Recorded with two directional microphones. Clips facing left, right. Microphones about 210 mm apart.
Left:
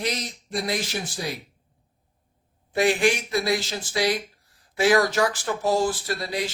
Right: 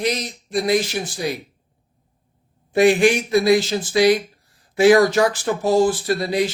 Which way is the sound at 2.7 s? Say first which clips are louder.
Right 7 dB; 20° right (ahead or behind).